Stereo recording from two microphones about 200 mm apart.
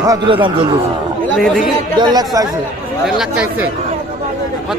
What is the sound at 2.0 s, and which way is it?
Speech, 20° right (ahead or behind).